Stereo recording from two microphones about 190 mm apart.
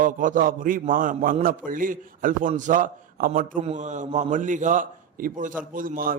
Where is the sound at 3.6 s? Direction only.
35° right (ahead or behind).